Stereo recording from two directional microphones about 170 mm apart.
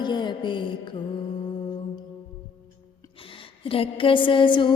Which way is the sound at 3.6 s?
30° left (ahead or behind).